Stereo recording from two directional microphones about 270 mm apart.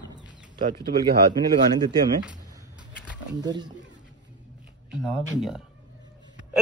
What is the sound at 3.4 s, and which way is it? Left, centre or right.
Speech, centre.